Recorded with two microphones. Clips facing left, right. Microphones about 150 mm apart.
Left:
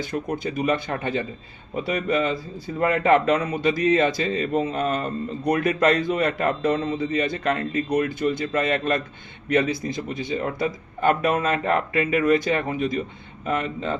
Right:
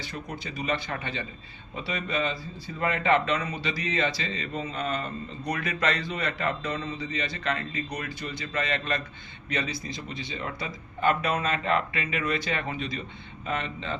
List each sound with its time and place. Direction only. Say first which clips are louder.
0.0 s speech: left 10 dB; 50° left (ahead or behind)